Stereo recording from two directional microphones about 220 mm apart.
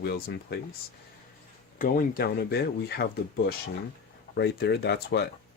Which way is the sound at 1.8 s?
40° left (ahead or behind).